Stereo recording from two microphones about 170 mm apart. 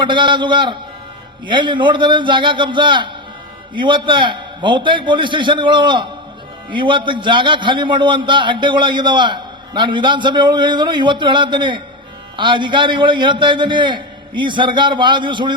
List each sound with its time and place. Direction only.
0.0 s a man's voice: 30° right (ahead or behind)